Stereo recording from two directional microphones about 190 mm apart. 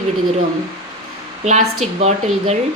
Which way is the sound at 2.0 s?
35° right (ahead or behind).